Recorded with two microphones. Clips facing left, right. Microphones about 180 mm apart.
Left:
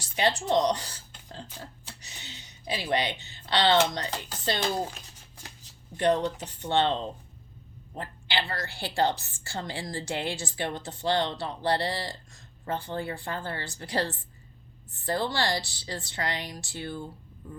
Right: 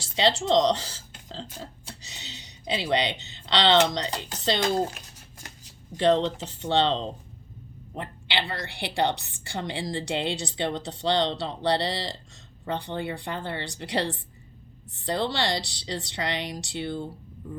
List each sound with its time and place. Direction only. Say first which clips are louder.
0.0 s speech: right 3 dB; 25° right (ahead or behind)
0.6 s a sound: right 3 dB; 25° right (ahead or behind)
2.9 s speech: right 1 dB; 20° right (ahead or behind)
6.0 s speech: right 3 dB; 25° right (ahead or behind)
15.3 s speech: right 1 dB; 20° right (ahead or behind)